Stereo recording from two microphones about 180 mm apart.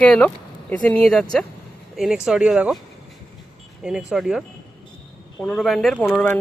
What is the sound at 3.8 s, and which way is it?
Speech, 5° right (ahead or behind).